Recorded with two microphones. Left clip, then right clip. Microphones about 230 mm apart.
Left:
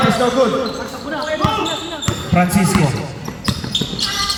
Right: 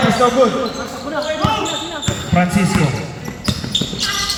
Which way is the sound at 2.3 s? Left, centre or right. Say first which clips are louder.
Left 1 dB; left.